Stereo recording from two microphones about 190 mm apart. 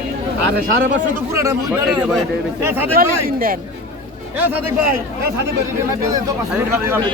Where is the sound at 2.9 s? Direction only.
50° right (ahead or behind).